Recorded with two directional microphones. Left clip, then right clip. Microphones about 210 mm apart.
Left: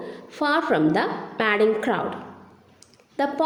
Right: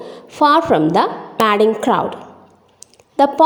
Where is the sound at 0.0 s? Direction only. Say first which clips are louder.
Right 11 dB; 30° right (ahead or behind).